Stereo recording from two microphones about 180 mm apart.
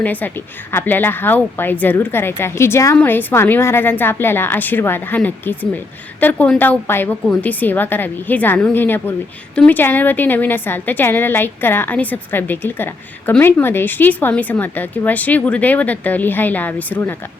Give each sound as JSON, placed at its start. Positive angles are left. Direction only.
{"t": 0.0, "sound": "a woman's voice", "side_deg": 10}